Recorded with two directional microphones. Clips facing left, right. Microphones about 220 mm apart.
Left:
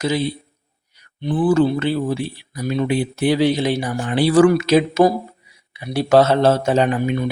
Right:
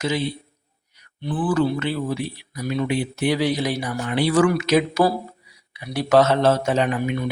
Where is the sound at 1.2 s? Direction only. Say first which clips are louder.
Left 5 dB; 25° left (ahead or behind).